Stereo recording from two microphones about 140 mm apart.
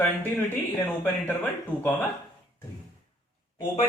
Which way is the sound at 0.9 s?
15° left (ahead or behind).